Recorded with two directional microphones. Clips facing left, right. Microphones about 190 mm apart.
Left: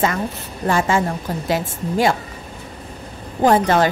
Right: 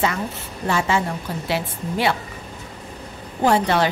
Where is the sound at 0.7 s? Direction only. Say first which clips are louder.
Left 3 dB; 50° left (ahead or behind).